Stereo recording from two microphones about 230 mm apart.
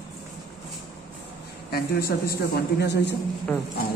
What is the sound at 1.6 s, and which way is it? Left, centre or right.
A man's voice, left.